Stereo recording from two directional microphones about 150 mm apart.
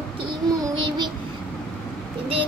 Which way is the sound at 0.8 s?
30° right (ahead or behind).